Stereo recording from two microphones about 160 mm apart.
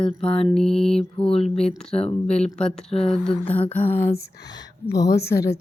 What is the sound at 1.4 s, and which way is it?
Music, 40° left (ahead or behind).